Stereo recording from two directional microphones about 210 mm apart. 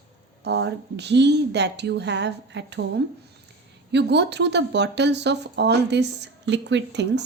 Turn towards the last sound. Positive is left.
turn(degrees=-55)  # may be behind; listen again after turning